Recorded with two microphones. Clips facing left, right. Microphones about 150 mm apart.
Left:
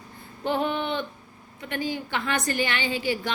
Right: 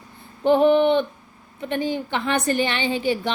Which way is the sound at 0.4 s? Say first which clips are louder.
Right 11 dB; 20° right (ahead or behind).